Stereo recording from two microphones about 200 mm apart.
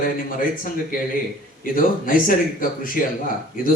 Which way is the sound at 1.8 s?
45° left (ahead or behind).